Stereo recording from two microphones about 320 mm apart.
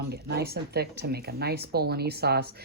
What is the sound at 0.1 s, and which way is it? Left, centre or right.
Speech, right.